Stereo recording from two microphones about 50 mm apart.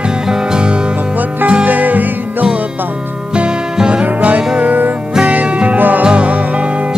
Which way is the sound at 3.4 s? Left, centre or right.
Centre.